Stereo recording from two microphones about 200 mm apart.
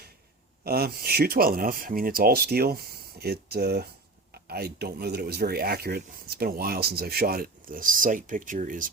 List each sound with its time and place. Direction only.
0.6 s speech: 50° right (ahead or behind)